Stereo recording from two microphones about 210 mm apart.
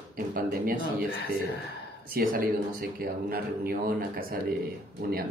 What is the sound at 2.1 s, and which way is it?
Speech, 45° right (ahead or behind).